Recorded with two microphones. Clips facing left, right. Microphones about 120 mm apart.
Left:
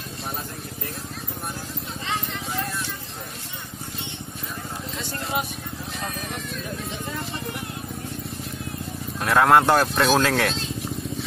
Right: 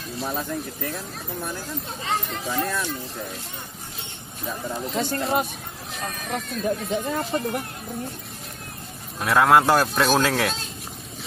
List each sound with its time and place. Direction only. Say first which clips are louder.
4.9 s speech: right 10 dB; 50° right (ahead or behind)
6.5 s speech: right 8 dB; 45° right (ahead or behind)
9.2 s speech: even; centre (ahead or behind)